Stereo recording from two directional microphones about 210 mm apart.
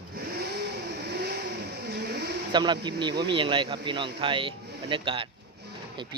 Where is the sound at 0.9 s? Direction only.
50° right (ahead or behind).